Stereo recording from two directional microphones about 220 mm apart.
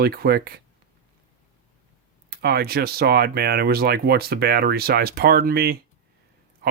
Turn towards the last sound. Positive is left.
turn(degrees=-45)  # may be behind; listen again after turning